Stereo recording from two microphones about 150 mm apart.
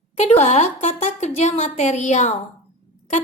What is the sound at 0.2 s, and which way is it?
A woman's voice, 50° left (ahead or behind).